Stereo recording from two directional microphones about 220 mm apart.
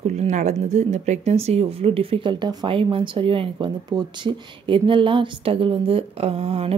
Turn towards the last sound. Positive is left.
turn(degrees=-30)  # may be behind; listen again after turning